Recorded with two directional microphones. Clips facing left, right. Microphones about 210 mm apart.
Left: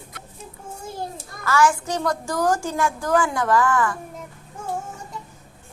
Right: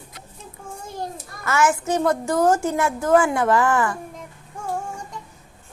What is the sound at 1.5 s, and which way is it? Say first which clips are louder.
A woman's voice: even; 20° right (ahead or behind).